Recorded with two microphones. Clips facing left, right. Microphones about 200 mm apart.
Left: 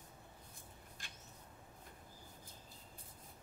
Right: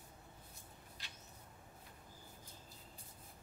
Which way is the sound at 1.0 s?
50° left (ahead or behind).